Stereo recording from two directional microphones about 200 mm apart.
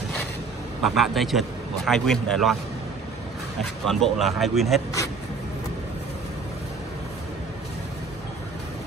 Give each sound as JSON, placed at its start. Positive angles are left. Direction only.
{"t": 0.8, "sound": "speech", "side_deg": 0}
{"t": 3.8, "sound": "speech", "side_deg": 0}